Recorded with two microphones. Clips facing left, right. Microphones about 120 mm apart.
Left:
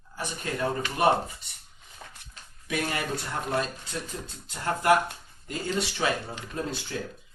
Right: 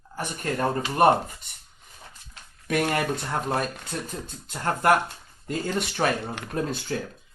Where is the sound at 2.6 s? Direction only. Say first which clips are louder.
Right 6 dB; 55° right (ahead or behind).